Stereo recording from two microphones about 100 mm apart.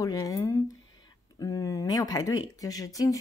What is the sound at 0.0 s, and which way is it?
Speech, 35° left (ahead or behind).